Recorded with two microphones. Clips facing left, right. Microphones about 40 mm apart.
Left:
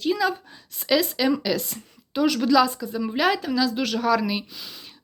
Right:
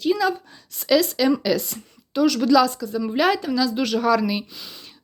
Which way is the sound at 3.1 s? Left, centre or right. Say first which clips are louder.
Right 2 dB; centre.